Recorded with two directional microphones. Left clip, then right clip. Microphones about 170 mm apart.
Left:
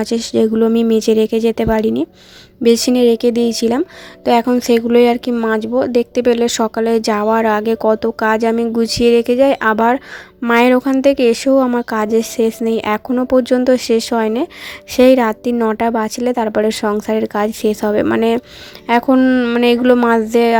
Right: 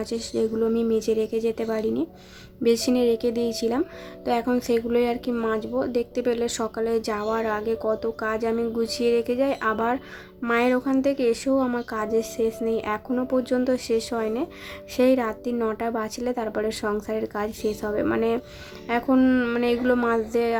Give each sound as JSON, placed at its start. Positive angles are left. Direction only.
{"t": 0.0, "sound": "a woman's voice", "side_deg": 50}